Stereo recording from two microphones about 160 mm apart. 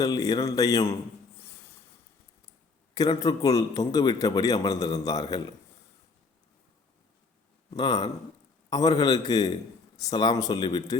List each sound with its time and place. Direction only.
0.0 s a man's voice: 25° left (ahead or behind)
2.9 s a man's voice: 20° left (ahead or behind)
7.8 s a man's voice: 25° left (ahead or behind)